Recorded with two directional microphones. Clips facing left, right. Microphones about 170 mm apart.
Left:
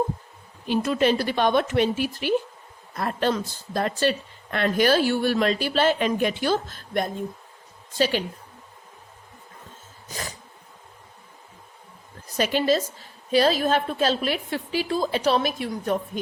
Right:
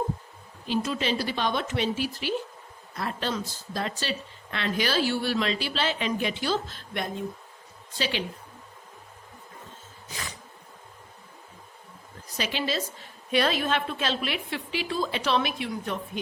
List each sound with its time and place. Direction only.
0.7 s speech: 55° left (ahead or behind)
10.1 s a sound: 40° left (ahead or behind)
12.4 s speech: 45° left (ahead or behind)
13.3 s a woman's voice: 35° left (ahead or behind)